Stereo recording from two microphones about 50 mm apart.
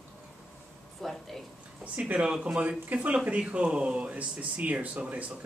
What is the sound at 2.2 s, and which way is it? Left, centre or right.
Speech, centre.